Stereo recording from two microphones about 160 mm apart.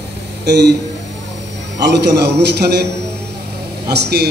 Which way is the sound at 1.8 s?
90° right.